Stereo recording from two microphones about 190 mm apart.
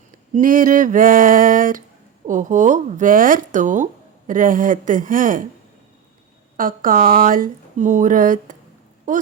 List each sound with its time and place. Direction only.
0.3 s speech: 45° right (ahead or behind)
6.6 s speech: 45° right (ahead or behind)